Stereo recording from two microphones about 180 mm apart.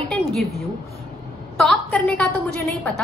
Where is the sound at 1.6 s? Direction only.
5° left (ahead or behind).